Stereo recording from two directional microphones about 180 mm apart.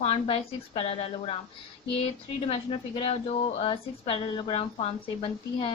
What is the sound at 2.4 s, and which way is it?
A woman's voice, 35° left (ahead or behind).